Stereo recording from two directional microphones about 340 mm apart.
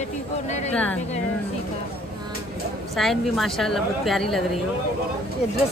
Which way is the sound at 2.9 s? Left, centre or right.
Centre.